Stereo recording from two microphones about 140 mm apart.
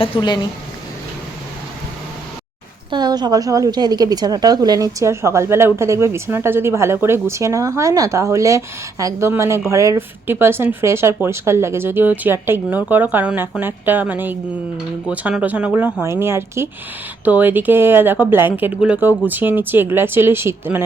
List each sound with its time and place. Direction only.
0.0 s a woman's voice: 30° left (ahead or behind)
2.9 s a woman's voice: 30° right (ahead or behind)